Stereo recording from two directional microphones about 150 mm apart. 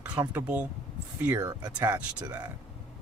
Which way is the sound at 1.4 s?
25° right (ahead or behind).